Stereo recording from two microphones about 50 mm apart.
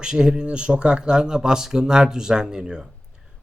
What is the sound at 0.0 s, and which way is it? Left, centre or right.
A man's voice, centre.